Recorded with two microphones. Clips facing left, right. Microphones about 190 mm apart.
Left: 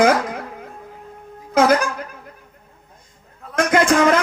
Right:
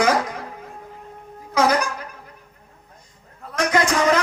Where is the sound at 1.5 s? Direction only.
50° left (ahead or behind).